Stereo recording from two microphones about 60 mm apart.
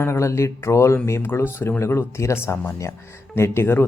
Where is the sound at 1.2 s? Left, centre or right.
Left.